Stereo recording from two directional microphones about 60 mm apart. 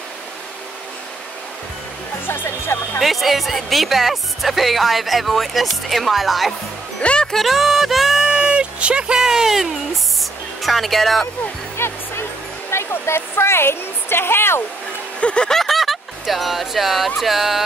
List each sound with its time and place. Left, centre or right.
2.2 s speech: left
3.0 s speech: centre
7.0 s speech: centre
7.4 s music: centre
10.6 s speech: centre
11.7 s music: left
12.7 s speech: left
15.1 s music: centre
17.2 s speech: centre